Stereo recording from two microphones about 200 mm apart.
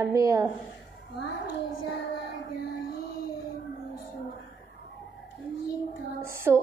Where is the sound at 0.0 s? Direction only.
15° right (ahead or behind).